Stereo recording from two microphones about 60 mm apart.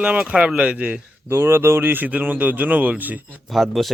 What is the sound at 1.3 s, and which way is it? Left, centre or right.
Speech, right.